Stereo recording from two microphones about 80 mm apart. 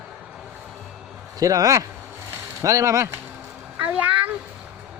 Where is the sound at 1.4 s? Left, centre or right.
Right.